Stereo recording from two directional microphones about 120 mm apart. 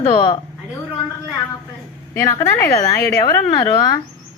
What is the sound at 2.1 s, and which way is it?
Speech, 25° left (ahead or behind).